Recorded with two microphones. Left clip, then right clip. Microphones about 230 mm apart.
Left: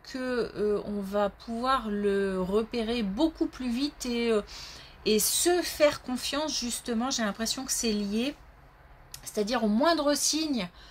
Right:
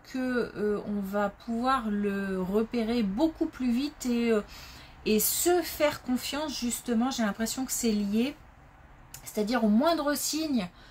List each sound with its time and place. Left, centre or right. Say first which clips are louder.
0.1 s a woman's voice: even; left